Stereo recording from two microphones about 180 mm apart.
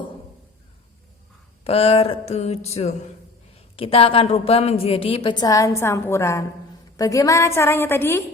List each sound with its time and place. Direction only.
1.6 s a woman's voice: 35° left (ahead or behind); by 8.2 s 15° left (ahead or behind)